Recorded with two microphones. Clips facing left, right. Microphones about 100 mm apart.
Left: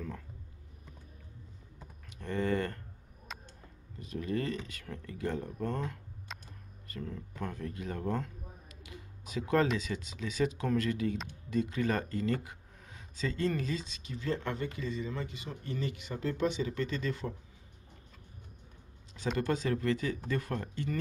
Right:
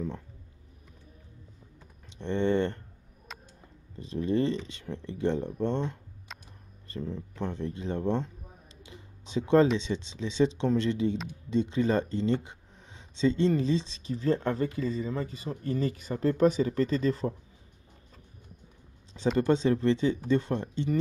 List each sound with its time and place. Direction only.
2.0 s typing: 25° right (ahead or behind)
3.3 s a sound: centre (ahead or behind)
4.0 s speech: 30° right (ahead or behind)
8.8 s computer keyboard: 25° right (ahead or behind)
9.8 s speech: 25° right (ahead or behind)
19.3 s speech: 25° right (ahead or behind)